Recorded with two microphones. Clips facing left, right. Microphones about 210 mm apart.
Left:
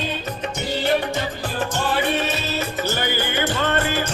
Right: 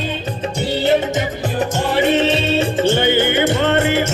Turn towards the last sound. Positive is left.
turn(degrees=-25)  # may be behind; listen again after turning